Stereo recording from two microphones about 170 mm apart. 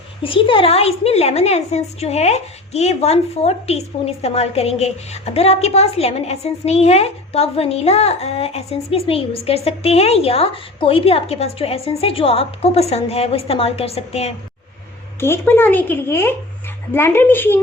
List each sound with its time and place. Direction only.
0.2 s a woman's voice: 30° left (ahead or behind)
15.2 s speech: 15° left (ahead or behind)